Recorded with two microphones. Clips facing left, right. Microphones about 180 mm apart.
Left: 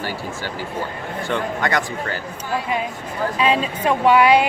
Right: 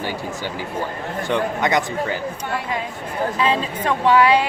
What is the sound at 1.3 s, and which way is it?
Speech, 20° right (ahead or behind).